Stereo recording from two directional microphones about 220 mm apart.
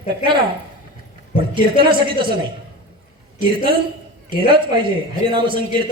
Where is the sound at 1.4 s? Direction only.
20° right (ahead or behind).